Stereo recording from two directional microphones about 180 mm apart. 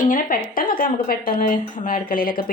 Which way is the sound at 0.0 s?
50° left (ahead or behind).